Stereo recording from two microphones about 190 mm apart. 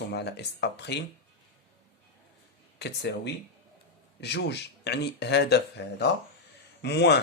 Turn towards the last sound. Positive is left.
turn(degrees=65)  # may be behind; listen again after turning